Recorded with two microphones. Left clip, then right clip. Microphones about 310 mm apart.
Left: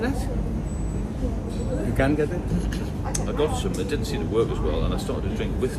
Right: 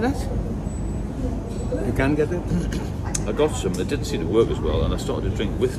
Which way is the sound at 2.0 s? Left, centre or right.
Centre.